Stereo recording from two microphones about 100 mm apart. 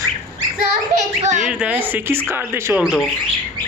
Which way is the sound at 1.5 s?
15° right (ahead or behind).